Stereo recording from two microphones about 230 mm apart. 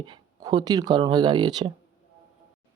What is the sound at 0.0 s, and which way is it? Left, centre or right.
Speech, centre.